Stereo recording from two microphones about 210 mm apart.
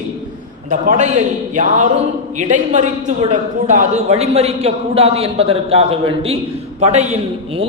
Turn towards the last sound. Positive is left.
turn(degrees=-30)  # may be behind; listen again after turning